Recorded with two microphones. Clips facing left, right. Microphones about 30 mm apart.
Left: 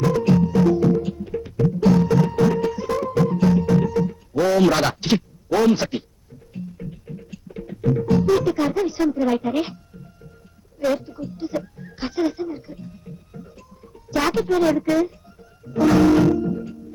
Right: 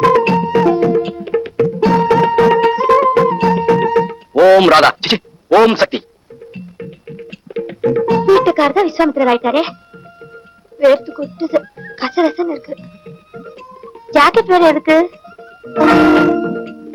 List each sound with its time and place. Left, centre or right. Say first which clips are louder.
0.0 s music: right 8 dB; right
6.5 s music: right 3 dB; right
10.8 s music: right 12 dB; right